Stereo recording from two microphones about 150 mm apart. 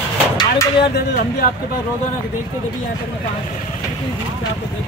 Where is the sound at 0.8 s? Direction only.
90° left.